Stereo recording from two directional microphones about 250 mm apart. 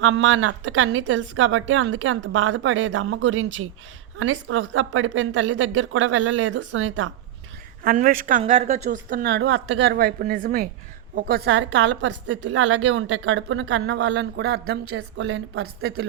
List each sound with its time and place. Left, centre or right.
0.0 s a woman's voice: right
7.9 s a woman's voice: right